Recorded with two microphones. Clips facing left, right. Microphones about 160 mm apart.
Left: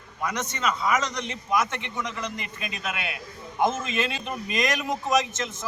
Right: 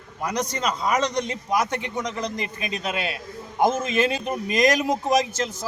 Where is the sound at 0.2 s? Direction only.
35° right (ahead or behind).